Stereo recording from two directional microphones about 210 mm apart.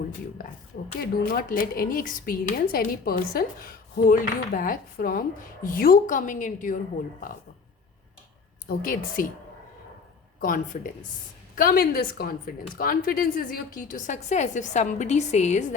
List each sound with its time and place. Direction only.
1.2 s a woman's voice: 45° left (ahead or behind)
8.6 s speech: 45° left (ahead or behind)
10.4 s a woman's voice: 40° left (ahead or behind)